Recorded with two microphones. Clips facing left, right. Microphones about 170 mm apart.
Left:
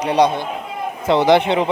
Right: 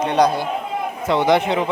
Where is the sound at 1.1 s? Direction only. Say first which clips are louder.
Left 3 dB; 30° left (ahead or behind).